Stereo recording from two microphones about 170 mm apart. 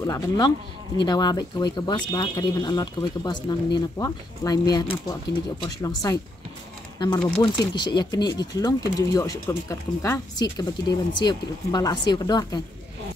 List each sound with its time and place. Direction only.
0.0 s speech: 20° left (ahead or behind)
7.0 s speech: 25° left (ahead or behind)